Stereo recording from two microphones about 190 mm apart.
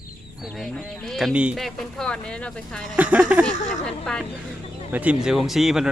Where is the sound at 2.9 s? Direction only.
10° right (ahead or behind).